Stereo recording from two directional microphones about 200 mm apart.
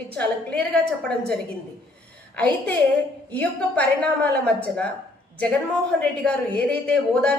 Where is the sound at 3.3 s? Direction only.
5° left (ahead or behind).